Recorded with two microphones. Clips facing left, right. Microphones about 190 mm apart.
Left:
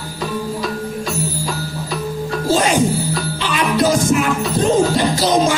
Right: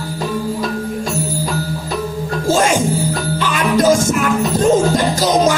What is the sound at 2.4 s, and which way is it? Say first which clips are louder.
Music: right 1 dB; 45° right (ahead or behind).